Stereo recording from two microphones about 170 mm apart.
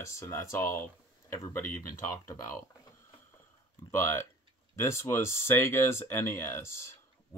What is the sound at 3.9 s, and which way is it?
Speech, 15° left (ahead or behind).